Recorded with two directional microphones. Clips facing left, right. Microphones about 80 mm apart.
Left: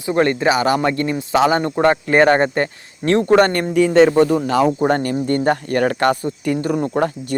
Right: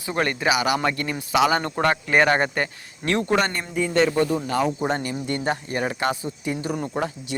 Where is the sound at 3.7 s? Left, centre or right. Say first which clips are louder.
Left 8 dB; left.